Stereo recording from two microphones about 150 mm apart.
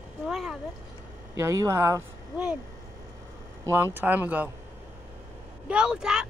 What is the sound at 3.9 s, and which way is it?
Speech, 10° right (ahead or behind).